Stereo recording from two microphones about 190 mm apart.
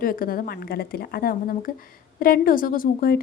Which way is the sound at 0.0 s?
50° left (ahead or behind).